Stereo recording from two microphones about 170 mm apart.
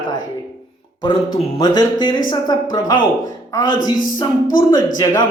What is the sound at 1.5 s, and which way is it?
Speech, 25° left (ahead or behind).